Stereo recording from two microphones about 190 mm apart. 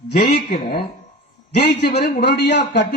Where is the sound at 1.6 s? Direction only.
60° left (ahead or behind).